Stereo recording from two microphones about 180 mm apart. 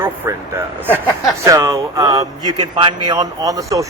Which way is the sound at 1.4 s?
20° right (ahead or behind).